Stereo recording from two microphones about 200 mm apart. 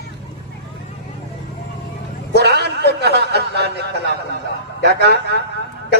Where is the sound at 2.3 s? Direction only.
55° right (ahead or behind).